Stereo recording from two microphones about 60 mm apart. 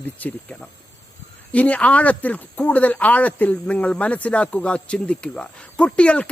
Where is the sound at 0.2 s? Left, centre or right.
Left.